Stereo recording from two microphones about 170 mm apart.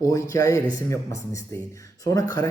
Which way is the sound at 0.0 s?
20° left (ahead or behind).